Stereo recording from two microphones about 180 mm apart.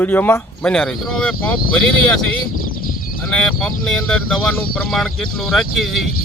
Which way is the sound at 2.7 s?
50° left (ahead or behind).